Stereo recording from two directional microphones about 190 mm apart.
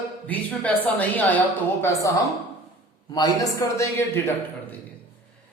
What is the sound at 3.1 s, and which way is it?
A man's voice, 20° left (ahead or behind).